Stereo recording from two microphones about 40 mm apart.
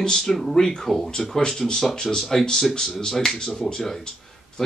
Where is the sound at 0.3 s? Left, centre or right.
Centre.